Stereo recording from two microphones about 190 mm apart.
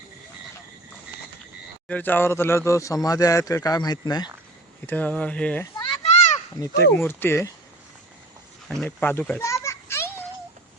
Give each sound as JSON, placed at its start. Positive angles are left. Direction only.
{"t": 1.9, "sound": "speech", "side_deg": 10}
{"t": 4.9, "sound": "speech", "side_deg": 10}
{"t": 5.7, "sound": "children playing", "side_deg": 25}
{"t": 6.9, "sound": "speech", "side_deg": 10}
{"t": 8.7, "sound": "children playing", "side_deg": 5}